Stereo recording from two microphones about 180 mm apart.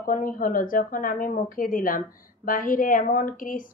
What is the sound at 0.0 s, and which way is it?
A woman's voice, 50° left (ahead or behind).